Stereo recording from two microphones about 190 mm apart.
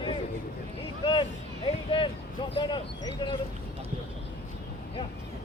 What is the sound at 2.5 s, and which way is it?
Speech, 25° left (ahead or behind).